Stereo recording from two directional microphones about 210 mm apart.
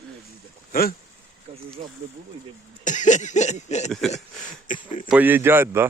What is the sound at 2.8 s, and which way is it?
Chuckle, 35° left (ahead or behind).